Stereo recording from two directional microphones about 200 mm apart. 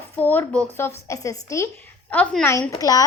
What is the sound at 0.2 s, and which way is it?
A woman's voice, 10° left (ahead or behind).